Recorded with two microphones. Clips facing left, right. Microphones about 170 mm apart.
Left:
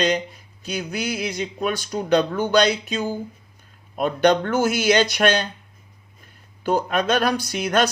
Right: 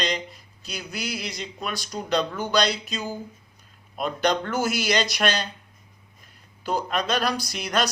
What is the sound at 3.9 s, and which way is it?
Speech, 55° left (ahead or behind).